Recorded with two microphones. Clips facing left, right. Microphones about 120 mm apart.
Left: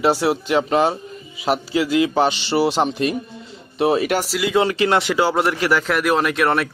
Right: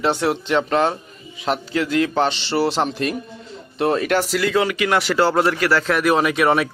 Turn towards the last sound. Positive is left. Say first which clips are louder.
# right 1 dB
turn(degrees=0)  # may be behind; listen again after turning